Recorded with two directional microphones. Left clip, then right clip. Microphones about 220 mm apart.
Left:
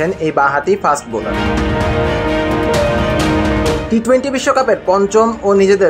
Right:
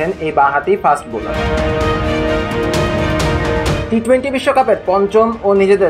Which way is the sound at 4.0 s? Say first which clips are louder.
Right 1 dB; 25° left (ahead or behind).